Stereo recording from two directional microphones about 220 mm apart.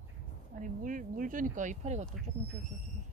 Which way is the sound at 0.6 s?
35° right (ahead or behind).